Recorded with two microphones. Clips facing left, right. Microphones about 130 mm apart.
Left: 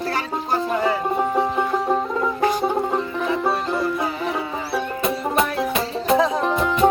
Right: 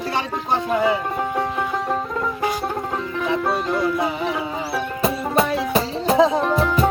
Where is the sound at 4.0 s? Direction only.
25° right (ahead or behind).